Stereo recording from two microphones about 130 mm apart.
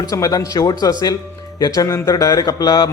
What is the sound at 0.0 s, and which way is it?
A man's voice, 30° left (ahead or behind).